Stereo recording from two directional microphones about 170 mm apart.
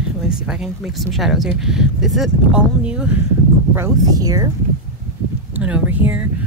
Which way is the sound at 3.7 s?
20° right (ahead or behind).